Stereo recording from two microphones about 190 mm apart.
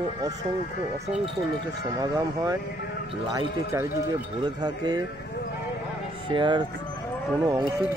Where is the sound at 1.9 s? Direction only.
20° right (ahead or behind).